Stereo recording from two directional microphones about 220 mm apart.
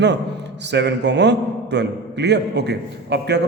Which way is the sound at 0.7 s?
50° right (ahead or behind).